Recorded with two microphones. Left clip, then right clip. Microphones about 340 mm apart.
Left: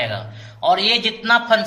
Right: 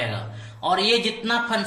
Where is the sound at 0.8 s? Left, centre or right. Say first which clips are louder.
Left 4 dB; left.